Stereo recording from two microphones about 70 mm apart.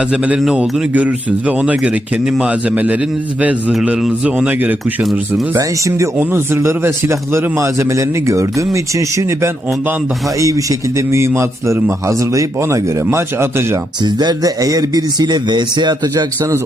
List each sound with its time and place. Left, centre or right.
0.1 s speech: centre
5.5 s a man's voice: right
6.1 s a man's voice: right
10.2 s a man's voice: right
14.0 s speech: right